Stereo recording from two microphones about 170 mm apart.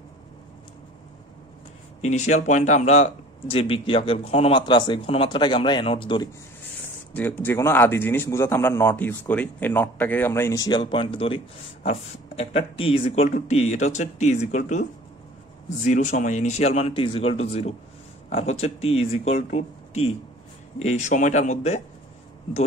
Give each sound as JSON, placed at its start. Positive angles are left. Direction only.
{"t": 2.0, "sound": "speech", "side_deg": 45}
{"t": 7.2, "sound": "a man's voice", "side_deg": 10}